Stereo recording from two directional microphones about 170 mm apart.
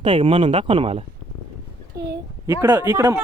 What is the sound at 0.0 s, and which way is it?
Speech, 30° right (ahead or behind).